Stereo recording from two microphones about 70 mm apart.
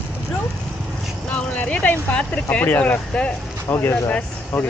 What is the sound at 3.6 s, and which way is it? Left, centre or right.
Speech, left.